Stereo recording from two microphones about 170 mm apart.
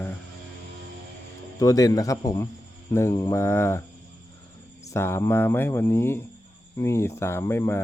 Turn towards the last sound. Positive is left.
turn(degrees=15)  # may be behind; listen again after turning